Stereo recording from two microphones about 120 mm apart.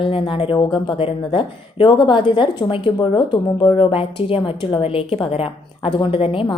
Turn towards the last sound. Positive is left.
turn(degrees=50)  # may be behind; listen again after turning